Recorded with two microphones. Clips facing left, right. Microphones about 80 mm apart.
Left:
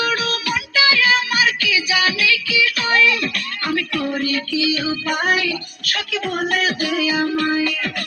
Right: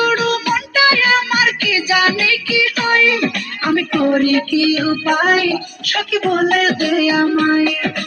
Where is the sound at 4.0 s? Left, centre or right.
Right.